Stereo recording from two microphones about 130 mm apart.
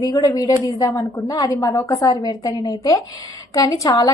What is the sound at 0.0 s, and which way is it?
A woman's voice, 30° left (ahead or behind).